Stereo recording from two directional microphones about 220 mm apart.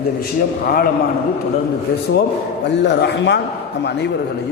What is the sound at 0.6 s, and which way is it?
Speech, 40° left (ahead or behind).